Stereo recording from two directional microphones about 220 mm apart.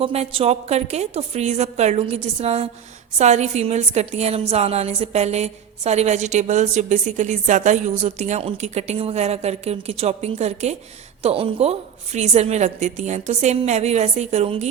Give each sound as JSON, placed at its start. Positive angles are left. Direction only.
{"t": 0.0, "sound": "a woman's voice", "side_deg": -25}